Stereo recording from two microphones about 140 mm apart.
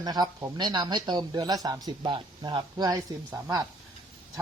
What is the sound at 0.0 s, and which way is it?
Speech, 30° right (ahead or behind).